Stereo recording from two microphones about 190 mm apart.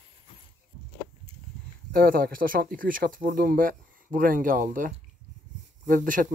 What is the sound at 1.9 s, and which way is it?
Speech, 50° right (ahead or behind).